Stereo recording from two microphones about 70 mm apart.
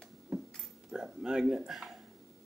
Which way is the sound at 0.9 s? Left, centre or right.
Centre.